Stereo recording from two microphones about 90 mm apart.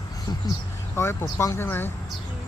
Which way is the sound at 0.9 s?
25° left (ahead or behind).